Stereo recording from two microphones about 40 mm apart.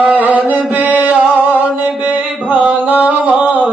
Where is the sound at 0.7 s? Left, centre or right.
Right.